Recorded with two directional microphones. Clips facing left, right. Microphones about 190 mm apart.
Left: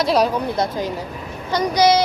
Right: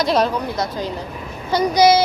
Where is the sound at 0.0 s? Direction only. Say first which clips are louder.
Even; centre (ahead or behind).